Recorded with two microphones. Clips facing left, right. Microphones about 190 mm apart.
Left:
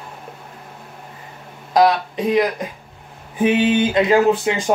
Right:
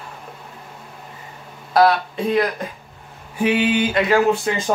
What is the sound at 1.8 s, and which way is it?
Speech, 15° left (ahead or behind).